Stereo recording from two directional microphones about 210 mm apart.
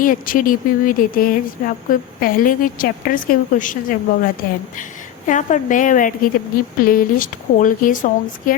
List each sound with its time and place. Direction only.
0.0 s speech: 40° left (ahead or behind)